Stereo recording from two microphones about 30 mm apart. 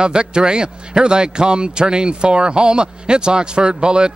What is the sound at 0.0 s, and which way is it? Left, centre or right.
A man's voice, right.